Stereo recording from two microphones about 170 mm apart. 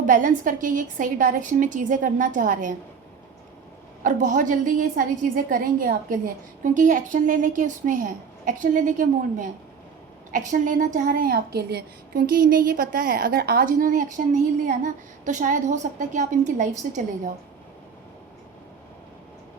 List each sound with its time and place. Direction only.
0.0 s a woman's voice: 50° right (ahead or behind)
4.0 s a woman's voice: 50° right (ahead or behind)